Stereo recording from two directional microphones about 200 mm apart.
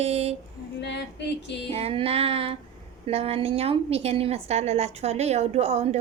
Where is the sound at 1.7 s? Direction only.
30° right (ahead or behind).